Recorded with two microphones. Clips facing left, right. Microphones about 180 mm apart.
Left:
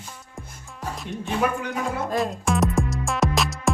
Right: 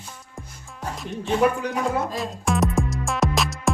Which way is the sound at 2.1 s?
Centre (ahead or behind).